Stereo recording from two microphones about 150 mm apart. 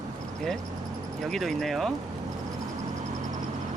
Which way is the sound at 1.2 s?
Centre (ahead or behind).